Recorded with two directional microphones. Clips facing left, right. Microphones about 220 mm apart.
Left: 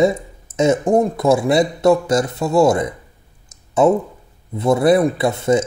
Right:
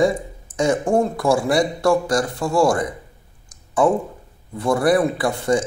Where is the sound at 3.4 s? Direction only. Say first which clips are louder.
Left 3 dB; 25° left (ahead or behind).